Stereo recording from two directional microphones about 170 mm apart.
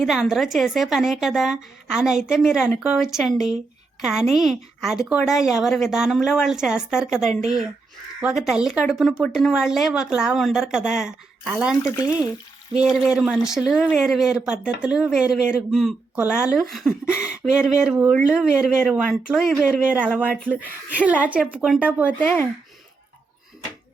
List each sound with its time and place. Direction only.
0.0 s a woman's voice: centre (ahead or behind)
11.8 s speech: 20° left (ahead or behind)
12.7 s a woman's voice: 5° right (ahead or behind)